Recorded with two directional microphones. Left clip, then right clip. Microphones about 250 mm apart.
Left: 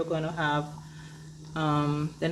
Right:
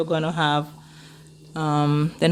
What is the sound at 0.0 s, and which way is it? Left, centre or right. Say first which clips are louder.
Speech: right 7 dB; right.